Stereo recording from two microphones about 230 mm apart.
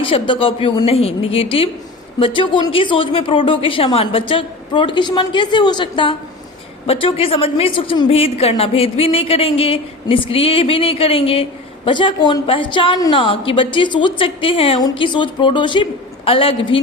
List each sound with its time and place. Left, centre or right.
0.0 s a woman's voice: left